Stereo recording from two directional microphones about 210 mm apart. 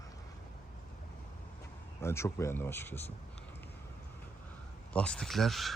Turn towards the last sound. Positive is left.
turn(degrees=0)  # may be behind; listen again after turning